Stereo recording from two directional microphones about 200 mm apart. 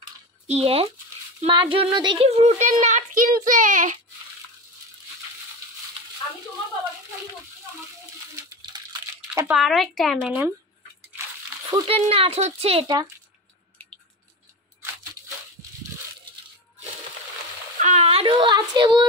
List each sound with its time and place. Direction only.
0.5 s speech: 30° right (ahead or behind)
9.3 s speech: 15° right (ahead or behind)
9.6 s speech: centre (ahead or behind)
11.7 s speech: 30° right (ahead or behind)
17.7 s speech: 35° right (ahead or behind)